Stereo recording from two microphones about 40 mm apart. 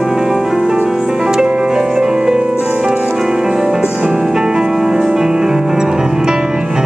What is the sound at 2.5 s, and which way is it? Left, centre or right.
Music, right.